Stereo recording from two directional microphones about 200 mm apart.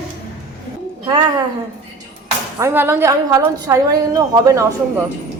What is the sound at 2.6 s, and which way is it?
A woman's voice, 10° right (ahead or behind).